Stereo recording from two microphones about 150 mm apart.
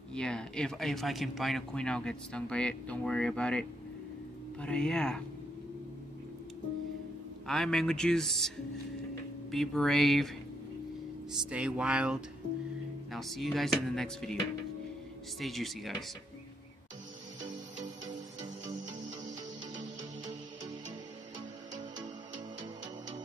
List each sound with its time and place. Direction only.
0.1 s speech: 5° left (ahead or behind)
7.4 s speech: centre (ahead or behind)
11.5 s speech: 10° right (ahead or behind)
17.7 s music: 50° right (ahead or behind)